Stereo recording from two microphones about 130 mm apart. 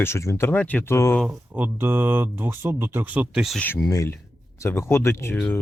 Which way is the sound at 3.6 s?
15° left (ahead or behind).